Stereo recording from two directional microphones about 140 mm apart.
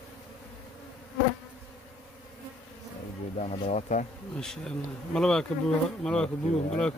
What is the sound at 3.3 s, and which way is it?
Speech, 50° left (ahead or behind).